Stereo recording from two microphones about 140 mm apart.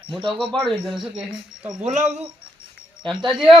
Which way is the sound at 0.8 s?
Centre (ahead or behind).